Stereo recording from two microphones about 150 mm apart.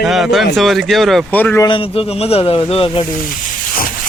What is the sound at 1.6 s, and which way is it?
Speech, 35° left (ahead or behind).